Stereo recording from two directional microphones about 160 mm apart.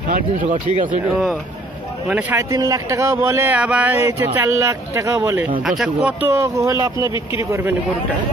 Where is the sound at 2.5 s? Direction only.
20° right (ahead or behind).